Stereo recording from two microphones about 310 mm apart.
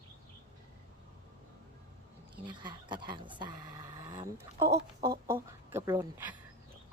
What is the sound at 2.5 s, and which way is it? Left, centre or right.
Speech, centre.